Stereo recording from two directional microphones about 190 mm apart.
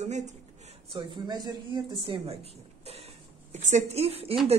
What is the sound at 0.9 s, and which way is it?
A woman's voice, 25° right (ahead or behind).